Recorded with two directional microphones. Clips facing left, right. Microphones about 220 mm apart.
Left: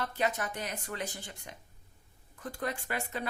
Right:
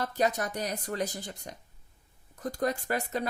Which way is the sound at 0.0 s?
40° right (ahead or behind).